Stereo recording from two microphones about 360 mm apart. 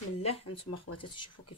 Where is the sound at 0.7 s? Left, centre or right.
Left.